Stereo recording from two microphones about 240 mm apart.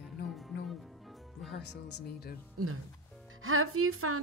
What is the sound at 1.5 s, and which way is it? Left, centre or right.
Speech, left.